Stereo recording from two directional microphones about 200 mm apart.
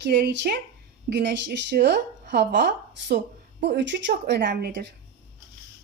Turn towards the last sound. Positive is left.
turn(degrees=-60)  # may be behind; listen again after turning